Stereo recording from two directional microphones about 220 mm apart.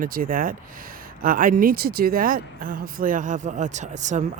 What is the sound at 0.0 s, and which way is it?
Speech, 40° right (ahead or behind).